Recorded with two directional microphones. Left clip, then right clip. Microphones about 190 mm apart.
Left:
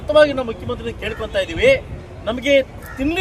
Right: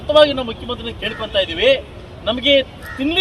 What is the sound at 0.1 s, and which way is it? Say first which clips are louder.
Speech: right 1 dB; 5° left (ahead or behind).